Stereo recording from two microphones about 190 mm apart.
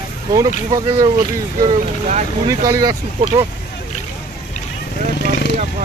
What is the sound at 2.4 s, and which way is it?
Speech, 20° right (ahead or behind).